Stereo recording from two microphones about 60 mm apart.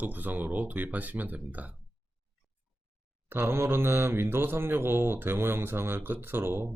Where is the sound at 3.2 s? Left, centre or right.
Right.